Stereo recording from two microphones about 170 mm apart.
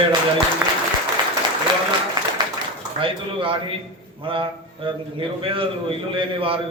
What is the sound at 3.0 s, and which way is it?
A man's voice, 30° right (ahead or behind).